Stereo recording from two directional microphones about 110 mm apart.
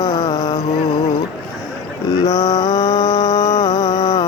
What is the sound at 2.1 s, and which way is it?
Mantra, 35° left (ahead or behind).